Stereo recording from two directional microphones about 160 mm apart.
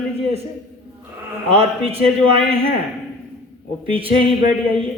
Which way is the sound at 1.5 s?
40° right (ahead or behind).